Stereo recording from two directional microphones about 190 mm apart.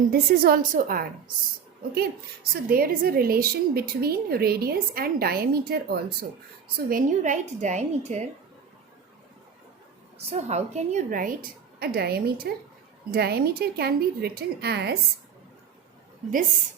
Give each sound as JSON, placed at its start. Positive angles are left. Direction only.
{"t": 0.1, "sound": "a woman's voice", "side_deg": -50}
{"t": 2.5, "sound": "a woman's voice", "side_deg": -50}
{"t": 6.7, "sound": "a woman's voice", "side_deg": -45}
{"t": 10.2, "sound": "a woman's voice", "side_deg": -35}